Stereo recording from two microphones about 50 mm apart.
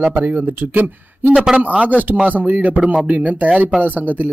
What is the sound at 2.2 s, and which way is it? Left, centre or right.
Speech, right.